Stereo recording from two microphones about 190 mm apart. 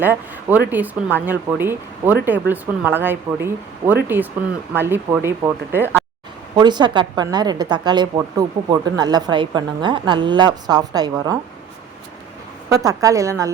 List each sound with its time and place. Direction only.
0.0 s speech: 10° right (ahead or behind)
6.6 s a woman's voice: 25° right (ahead or behind)
12.6 s speech: 20° right (ahead or behind)